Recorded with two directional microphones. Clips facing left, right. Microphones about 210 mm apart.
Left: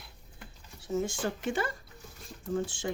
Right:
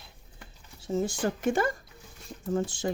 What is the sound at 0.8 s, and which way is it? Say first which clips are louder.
Speech: right 3 dB; 35° right (ahead or behind).